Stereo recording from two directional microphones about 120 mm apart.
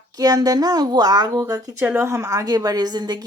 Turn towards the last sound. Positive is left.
turn(degrees=-35)  # may be behind; listen again after turning